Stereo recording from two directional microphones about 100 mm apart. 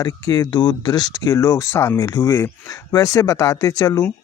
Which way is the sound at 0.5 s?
50° left (ahead or behind).